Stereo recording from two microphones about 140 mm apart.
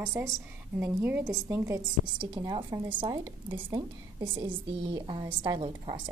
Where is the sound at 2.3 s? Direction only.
35° right (ahead or behind).